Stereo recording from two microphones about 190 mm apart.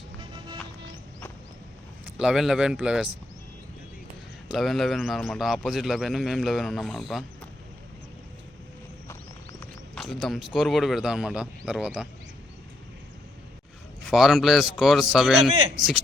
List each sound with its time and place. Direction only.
0.2 s music: 25° right (ahead or behind)
2.1 s a man's voice: centre (ahead or behind)
4.4 s a man's voice: centre (ahead or behind)
9.9 s a man's voice: centre (ahead or behind)
14.1 s a man's voice: centre (ahead or behind)